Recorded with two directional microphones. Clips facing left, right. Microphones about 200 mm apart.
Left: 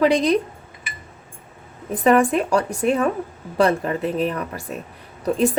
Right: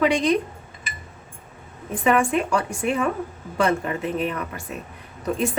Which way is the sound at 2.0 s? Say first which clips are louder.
Left 4 dB; 35° left (ahead or behind).